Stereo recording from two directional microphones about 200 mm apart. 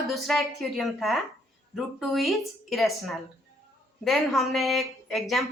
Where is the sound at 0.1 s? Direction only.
Centre (ahead or behind).